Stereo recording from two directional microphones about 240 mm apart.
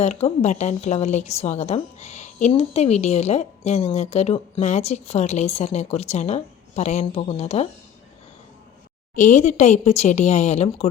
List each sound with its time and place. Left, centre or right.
0.0 s a woman's voice: left
9.1 s a woman's voice: left